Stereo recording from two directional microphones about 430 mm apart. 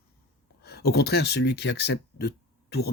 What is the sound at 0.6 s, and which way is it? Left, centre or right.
Speech, left.